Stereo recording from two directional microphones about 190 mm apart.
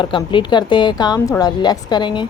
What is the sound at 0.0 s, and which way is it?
A woman's voice, 25° left (ahead or behind).